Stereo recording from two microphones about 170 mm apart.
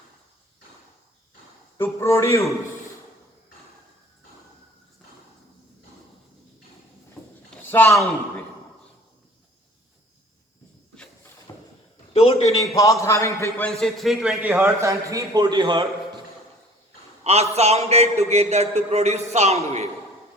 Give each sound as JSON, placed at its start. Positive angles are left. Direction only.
{"t": 1.8, "sound": "a man's voice", "side_deg": 15}
{"t": 7.2, "sound": "a sound", "side_deg": 0}
{"t": 7.7, "sound": "a man's voice", "side_deg": 10}
{"t": 11.5, "sound": "a sound", "side_deg": 20}
{"t": 12.1, "sound": "a man's voice", "side_deg": 35}
{"t": 12.6, "sound": "a man's voice", "side_deg": 20}
{"t": 13.7, "sound": "a man's voice", "side_deg": 0}
{"t": 14.6, "sound": "a man's voice", "side_deg": -15}
{"t": 17.5, "sound": "a man's voice", "side_deg": -40}